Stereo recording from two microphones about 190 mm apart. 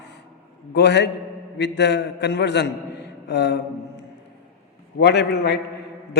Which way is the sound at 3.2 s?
65° left (ahead or behind).